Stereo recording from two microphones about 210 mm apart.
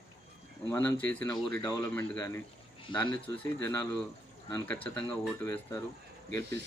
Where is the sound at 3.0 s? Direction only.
25° left (ahead or behind).